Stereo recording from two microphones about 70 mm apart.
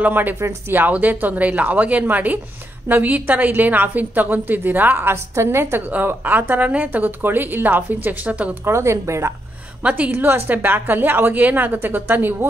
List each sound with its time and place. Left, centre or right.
0.0 s a woman's voice: right
0.4 s speech: right
0.7 s a woman's voice: right
5.8 s a woman's voice: right
8.6 s speech: right
9.8 s a woman's voice: centre
10.1 s a woman's voice: right